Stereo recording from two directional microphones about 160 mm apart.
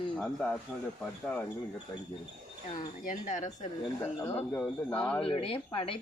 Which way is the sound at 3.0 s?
50° left (ahead or behind).